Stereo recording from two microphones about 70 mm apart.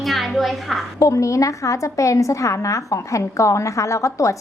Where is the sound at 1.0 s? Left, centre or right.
Left.